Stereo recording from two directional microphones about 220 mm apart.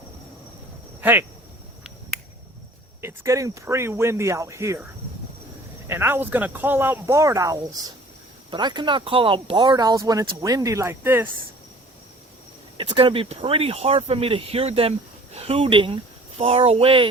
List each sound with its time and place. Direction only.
1.0 s speech: 10° right (ahead or behind)
3.0 s speech: 10° right (ahead or behind)
5.9 s speech: 10° right (ahead or behind)
12.7 s speech: 20° right (ahead or behind)